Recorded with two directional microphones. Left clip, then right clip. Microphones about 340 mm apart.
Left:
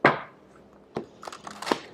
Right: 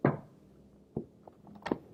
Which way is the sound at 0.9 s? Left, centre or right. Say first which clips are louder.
Left 8 dB; centre.